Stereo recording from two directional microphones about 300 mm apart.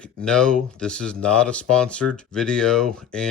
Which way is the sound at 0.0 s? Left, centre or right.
Centre.